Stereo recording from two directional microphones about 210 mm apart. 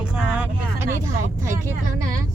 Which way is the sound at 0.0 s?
5° right (ahead or behind).